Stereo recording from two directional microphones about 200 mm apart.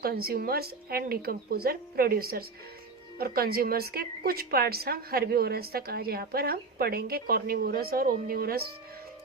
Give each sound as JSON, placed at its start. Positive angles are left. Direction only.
{"t": 0.0, "sound": "a woman's voice", "side_deg": -50}